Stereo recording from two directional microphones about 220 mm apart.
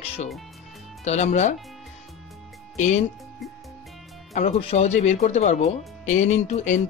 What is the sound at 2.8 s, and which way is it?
Speech, 30° left (ahead or behind).